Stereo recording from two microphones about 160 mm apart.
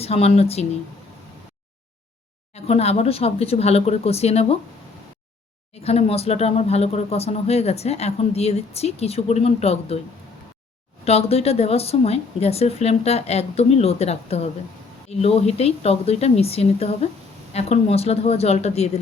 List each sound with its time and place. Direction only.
0.0 s speech: 40° left (ahead or behind)
2.6 s speech: 40° left (ahead or behind)
5.8 s speech: 40° left (ahead or behind)
11.0 s speech: 40° left (ahead or behind)